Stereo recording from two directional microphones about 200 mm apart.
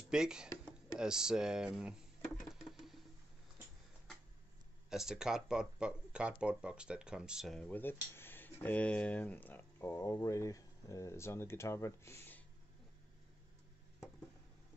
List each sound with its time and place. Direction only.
0.1 s speech: 5° right (ahead or behind)
2.4 s a sound: centre (ahead or behind)
4.8 s speech: centre (ahead or behind)